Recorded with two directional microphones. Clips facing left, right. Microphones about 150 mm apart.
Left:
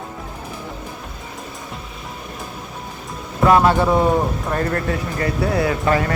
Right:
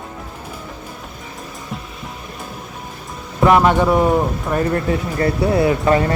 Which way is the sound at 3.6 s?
10° left (ahead or behind).